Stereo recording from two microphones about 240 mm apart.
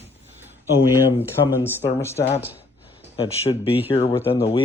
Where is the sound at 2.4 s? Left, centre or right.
Centre.